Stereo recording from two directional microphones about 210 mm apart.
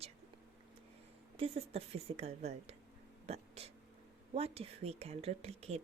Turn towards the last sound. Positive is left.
turn(degrees=-30)  # may be behind; listen again after turning